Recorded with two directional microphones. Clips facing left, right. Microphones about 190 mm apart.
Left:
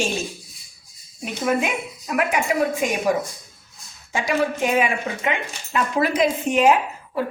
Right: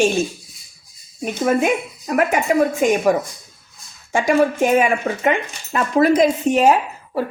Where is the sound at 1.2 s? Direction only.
45° right (ahead or behind).